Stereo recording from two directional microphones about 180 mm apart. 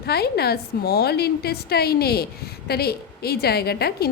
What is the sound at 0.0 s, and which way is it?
A woman's voice, 60° left (ahead or behind).